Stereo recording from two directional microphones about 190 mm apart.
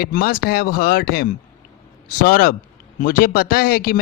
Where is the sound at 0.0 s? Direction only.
50° left (ahead or behind).